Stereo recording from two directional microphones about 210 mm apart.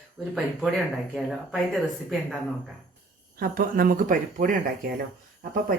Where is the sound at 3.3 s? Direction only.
40° right (ahead or behind).